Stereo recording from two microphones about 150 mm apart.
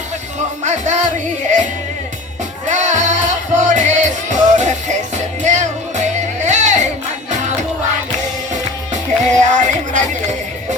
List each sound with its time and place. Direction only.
0.6 s music: 50° right (ahead or behind)
2.6 s music: 55° right (ahead or behind)
8.9 s music: 55° right (ahead or behind)